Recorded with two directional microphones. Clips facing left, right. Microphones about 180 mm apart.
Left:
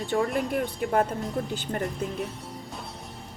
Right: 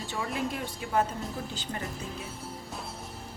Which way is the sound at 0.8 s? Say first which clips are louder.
Left 1 dB; 55° left (ahead or behind).